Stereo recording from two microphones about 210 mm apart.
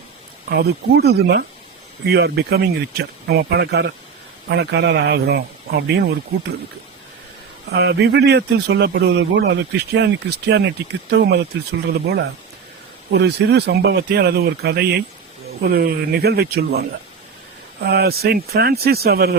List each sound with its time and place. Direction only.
0.5 s a man's voice: 50° right (ahead or behind)
7.7 s a man's voice: 55° right (ahead or behind)
17.7 s a man's voice: 50° right (ahead or behind)